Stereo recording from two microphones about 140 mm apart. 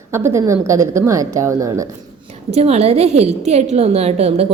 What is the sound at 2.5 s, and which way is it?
A woman's voice, 50° right (ahead or behind).